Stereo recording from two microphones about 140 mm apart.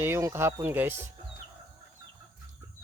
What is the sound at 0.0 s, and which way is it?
Speech, 20° right (ahead or behind).